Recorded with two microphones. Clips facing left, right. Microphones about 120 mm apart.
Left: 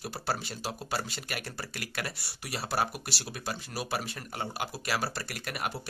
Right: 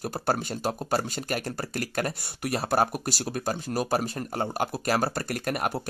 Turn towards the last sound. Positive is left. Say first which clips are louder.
# right 8 dB
turn(degrees=-45)  # may be behind; listen again after turning